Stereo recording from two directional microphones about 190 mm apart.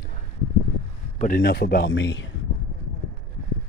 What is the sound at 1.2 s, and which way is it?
Speech, 50° left (ahead or behind).